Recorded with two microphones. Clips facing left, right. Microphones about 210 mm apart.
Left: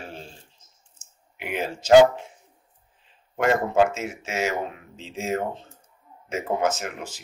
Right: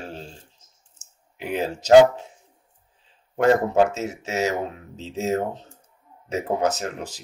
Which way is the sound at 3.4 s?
35° right (ahead or behind).